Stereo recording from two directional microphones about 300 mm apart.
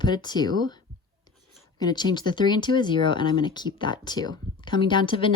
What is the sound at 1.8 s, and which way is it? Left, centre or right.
Speech, centre.